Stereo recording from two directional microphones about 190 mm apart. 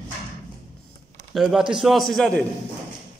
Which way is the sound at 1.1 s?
Centre (ahead or behind).